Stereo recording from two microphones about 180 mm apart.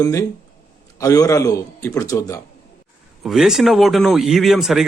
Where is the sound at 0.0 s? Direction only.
15° left (ahead or behind).